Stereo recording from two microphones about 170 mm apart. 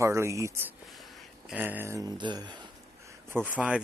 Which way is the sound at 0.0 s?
15° right (ahead or behind).